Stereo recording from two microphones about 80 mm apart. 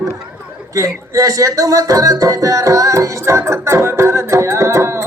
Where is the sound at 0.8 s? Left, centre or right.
Right.